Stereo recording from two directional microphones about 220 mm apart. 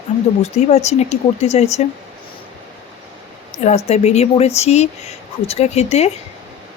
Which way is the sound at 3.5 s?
30° left (ahead or behind).